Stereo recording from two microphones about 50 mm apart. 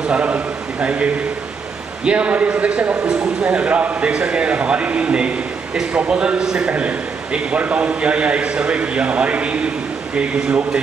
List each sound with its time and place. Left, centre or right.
0.1 s a man's voice: right